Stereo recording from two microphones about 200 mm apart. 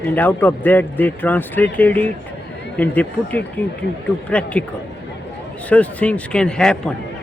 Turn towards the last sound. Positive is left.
turn(degrees=5)  # may be behind; listen again after turning